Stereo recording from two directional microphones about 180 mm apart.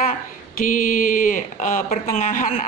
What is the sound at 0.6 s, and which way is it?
Speech, 50° left (ahead or behind).